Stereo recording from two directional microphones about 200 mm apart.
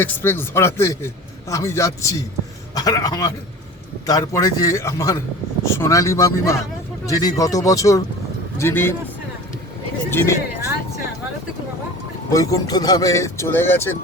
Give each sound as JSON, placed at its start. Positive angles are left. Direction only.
{"t": 0.0, "sound": "a man's voice", "side_deg": 10}
{"t": 10.1, "sound": "a man's voice", "side_deg": 10}
{"t": 12.3, "sound": "a man's voice", "side_deg": 15}